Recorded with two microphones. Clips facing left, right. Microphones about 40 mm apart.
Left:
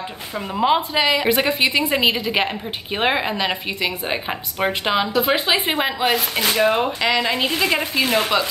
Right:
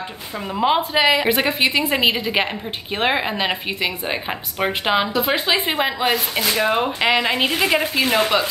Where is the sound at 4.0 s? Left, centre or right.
Centre.